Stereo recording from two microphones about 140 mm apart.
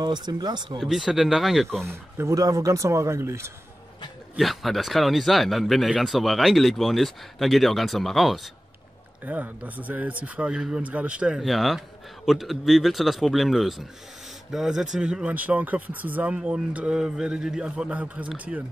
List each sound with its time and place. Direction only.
0.0 s speech: 30° right (ahead or behind)
0.7 s speech: centre (ahead or behind)
1.9 s speech: 20° right (ahead or behind)
4.4 s speech: centre (ahead or behind)
9.2 s speech: 10° right (ahead or behind)